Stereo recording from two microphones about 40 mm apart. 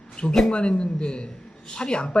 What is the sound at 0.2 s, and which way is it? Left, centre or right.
Speech, left.